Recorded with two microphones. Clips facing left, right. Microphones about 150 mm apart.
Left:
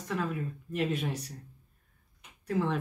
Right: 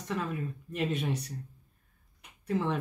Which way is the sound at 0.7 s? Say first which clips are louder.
Even; 5° left (ahead or behind).